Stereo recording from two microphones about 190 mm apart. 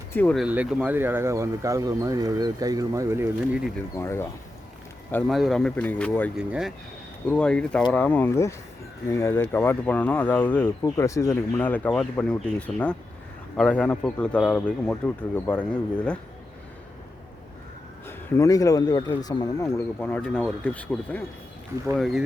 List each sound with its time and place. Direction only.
0.1 s speech: 10° left (ahead or behind)
0.4 s speech: 5° right (ahead or behind)
3.9 s speech: 15° left (ahead or behind)
5.1 s speech: centre (ahead or behind)
6.3 s speech: centre (ahead or behind)
18.0 s speech: 15° left (ahead or behind)